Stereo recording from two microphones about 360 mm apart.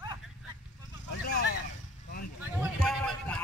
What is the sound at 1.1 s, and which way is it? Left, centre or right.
Vehicle, left.